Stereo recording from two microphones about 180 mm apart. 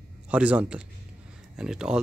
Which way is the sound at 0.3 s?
5° right (ahead or behind).